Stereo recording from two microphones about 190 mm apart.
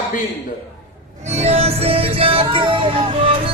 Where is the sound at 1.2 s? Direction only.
35° right (ahead or behind).